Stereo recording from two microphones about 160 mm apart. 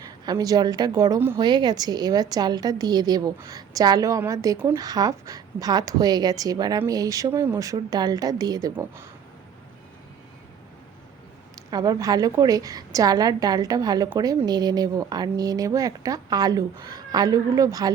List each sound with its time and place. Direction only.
0.3 s a woman's voice: 25° right (ahead or behind)
11.7 s a woman's voice: 25° right (ahead or behind)